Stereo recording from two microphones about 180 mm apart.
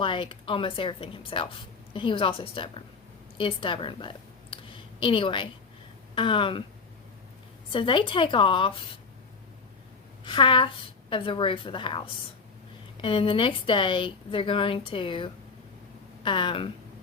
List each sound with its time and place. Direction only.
0.0 s a woman's voice: 30° left (ahead or behind)
7.7 s a woman's voice: 30° left (ahead or behind)
10.2 s a woman's voice: 25° left (ahead or behind)